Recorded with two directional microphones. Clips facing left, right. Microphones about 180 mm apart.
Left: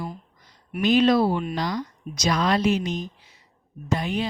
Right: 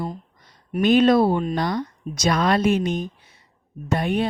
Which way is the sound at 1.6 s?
60° right (ahead or behind).